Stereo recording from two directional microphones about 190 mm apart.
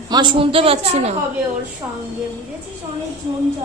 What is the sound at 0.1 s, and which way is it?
A woman's voice, 25° right (ahead or behind).